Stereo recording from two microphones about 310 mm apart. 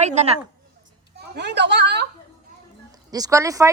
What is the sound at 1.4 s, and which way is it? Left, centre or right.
Speech, right.